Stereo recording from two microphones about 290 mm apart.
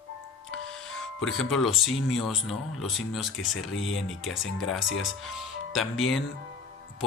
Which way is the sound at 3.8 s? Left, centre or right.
Left.